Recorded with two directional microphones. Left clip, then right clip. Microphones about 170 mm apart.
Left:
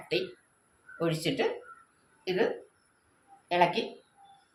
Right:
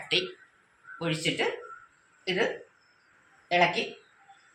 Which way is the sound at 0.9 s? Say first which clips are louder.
Even; 90° left.